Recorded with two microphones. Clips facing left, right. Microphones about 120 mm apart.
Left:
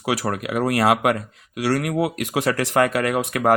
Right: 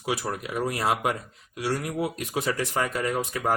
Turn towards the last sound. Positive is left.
turn(degrees=70)  # may be behind; listen again after turning